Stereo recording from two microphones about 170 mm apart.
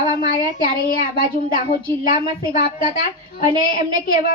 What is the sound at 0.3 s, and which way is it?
A woman's voice, 55° left (ahead or behind).